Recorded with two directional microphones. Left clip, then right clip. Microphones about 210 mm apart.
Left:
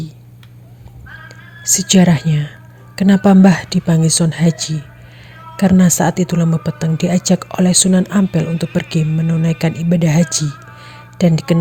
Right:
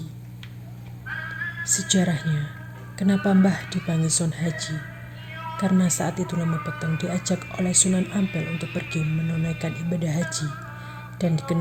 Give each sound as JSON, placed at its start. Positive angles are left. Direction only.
{"t": 1.3, "sound": "speech", "side_deg": 35}
{"t": 2.9, "sound": "music", "side_deg": 40}
{"t": 3.2, "sound": "speech", "side_deg": 40}